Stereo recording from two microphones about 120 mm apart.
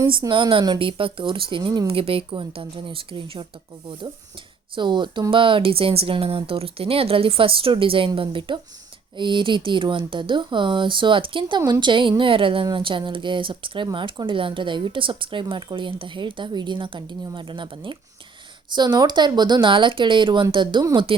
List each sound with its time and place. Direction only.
0.2 s speech: 30° right (ahead or behind)
0.8 s speech: 50° right (ahead or behind)
4.7 s speech: 40° right (ahead or behind)